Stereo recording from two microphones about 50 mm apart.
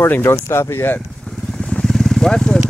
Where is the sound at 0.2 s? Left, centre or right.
Left.